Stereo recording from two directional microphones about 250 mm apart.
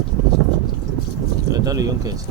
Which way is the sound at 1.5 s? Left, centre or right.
Centre.